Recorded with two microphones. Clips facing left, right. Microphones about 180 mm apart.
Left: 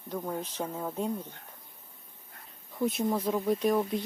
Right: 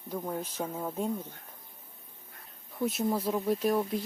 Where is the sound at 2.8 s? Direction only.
Centre (ahead or behind).